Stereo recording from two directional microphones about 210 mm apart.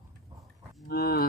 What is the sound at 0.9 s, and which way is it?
Livestock, 45° left (ahead or behind).